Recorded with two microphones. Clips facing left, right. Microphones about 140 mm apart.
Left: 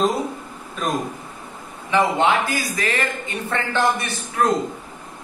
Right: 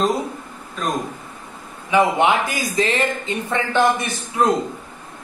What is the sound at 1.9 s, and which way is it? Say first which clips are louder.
A man's voice: right 2 dB; 15° right (ahead or behind).